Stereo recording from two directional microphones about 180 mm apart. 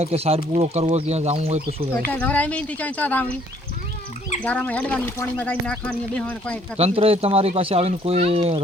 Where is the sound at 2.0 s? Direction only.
10° left (ahead or behind).